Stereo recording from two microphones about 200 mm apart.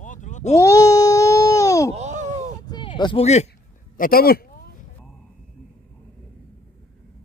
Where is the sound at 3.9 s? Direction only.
45° left (ahead or behind).